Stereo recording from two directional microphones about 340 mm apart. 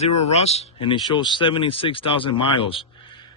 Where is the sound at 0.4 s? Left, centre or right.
Centre.